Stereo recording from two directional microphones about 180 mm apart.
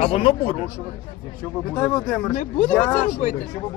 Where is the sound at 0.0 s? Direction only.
30° left (ahead or behind).